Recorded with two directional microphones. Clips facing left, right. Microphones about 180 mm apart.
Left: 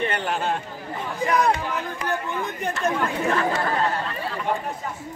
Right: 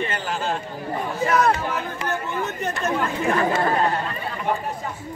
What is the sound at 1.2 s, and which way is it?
Speech, 15° left (ahead or behind).